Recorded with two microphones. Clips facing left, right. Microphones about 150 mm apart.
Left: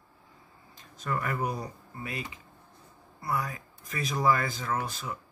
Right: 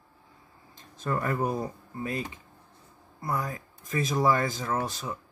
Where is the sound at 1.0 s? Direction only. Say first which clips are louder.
Right 3 dB; 30° right (ahead or behind).